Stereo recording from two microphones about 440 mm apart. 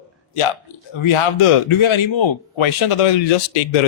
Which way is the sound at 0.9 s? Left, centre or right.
Left.